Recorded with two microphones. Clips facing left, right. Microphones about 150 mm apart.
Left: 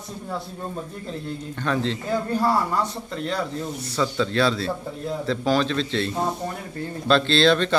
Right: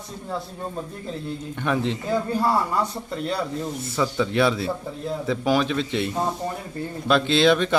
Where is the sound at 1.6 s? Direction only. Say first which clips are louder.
Right 1 dB; 15° right (ahead or behind).